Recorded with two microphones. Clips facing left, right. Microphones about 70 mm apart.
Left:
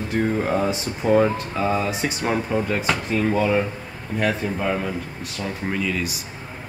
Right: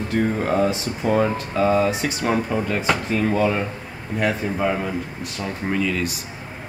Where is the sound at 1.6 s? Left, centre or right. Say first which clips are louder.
Right 4 dB; centre.